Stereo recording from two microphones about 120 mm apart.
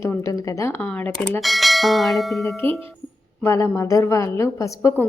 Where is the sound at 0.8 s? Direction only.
10° left (ahead or behind).